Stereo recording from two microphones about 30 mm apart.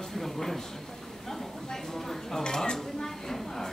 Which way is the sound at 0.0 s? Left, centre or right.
Centre.